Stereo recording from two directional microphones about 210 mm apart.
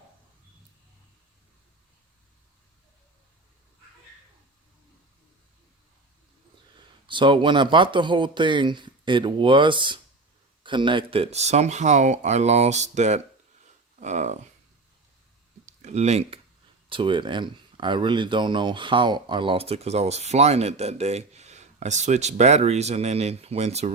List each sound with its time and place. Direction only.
7.1 s speech: 25° right (ahead or behind)
15.6 s a sound: 35° right (ahead or behind)
16.9 s speech: 25° right (ahead or behind)